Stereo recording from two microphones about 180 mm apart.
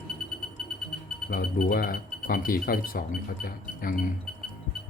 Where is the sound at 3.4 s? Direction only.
50° left (ahead or behind).